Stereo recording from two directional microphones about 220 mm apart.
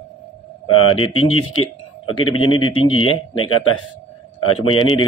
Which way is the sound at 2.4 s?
75° left (ahead or behind).